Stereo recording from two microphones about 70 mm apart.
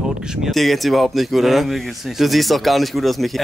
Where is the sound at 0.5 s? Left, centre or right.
Centre.